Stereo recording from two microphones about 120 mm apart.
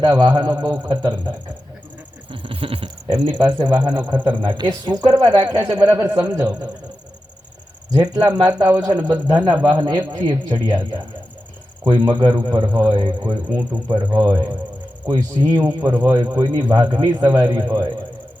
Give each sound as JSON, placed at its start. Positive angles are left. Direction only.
{"t": 0.0, "sound": "speech", "side_deg": -35}
{"t": 2.3, "sound": "a sound", "side_deg": -45}
{"t": 3.8, "sound": "speech", "side_deg": -40}
{"t": 4.3, "sound": "speech", "side_deg": -15}
{"t": 4.5, "sound": "speech", "side_deg": -35}
{"t": 5.8, "sound": "speech", "side_deg": -20}
{"t": 7.9, "sound": "speech", "side_deg": -30}